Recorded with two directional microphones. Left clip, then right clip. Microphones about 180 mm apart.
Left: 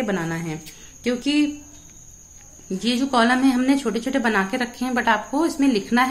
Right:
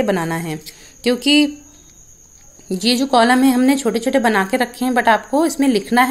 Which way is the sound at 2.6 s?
45° right (ahead or behind).